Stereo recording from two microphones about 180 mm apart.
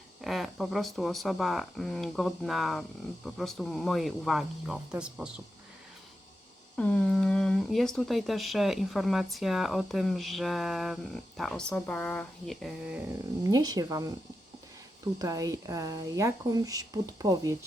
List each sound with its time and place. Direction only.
0.2 s speech: centre (ahead or behind)
6.7 s speech: 5° left (ahead or behind)
13.4 s speech: 20° right (ahead or behind)
15.2 s speech: 20° right (ahead or behind)